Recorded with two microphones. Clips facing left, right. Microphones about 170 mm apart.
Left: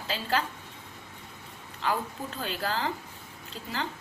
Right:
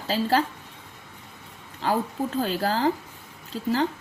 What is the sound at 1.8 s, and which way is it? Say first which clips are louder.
A woman's voice: right 6 dB; 40° right (ahead or behind).